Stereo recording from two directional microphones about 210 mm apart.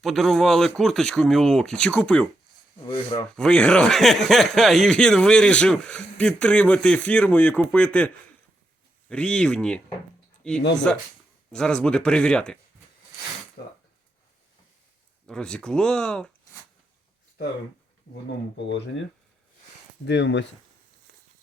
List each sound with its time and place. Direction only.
0.0 s speech: centre (ahead or behind)
3.3 s speech: 5° left (ahead or behind)
15.3 s speech: 5° left (ahead or behind)
18.5 s speech: 60° left (ahead or behind)
20.1 s speech: 55° left (ahead or behind)